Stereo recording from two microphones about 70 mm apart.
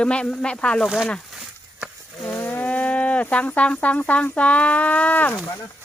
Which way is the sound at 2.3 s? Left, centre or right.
Left.